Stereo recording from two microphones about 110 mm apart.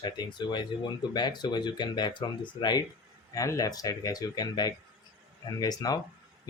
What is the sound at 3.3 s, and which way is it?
Speech, 30° left (ahead or behind).